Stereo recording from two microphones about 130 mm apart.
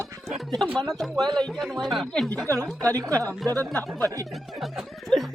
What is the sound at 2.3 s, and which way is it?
Speech, 25° right (ahead or behind).